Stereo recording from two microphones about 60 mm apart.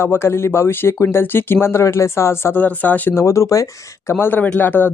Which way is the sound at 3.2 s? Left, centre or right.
Left.